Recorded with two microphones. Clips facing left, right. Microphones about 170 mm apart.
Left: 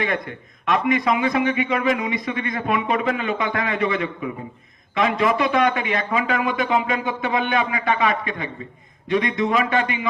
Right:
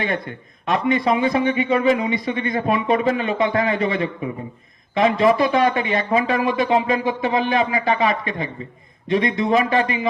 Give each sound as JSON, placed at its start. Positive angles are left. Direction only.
{"t": 0.0, "sound": "a man's voice", "side_deg": -30}